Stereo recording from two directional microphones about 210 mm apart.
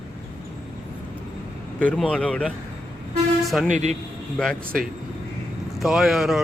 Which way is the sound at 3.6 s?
35° right (ahead or behind).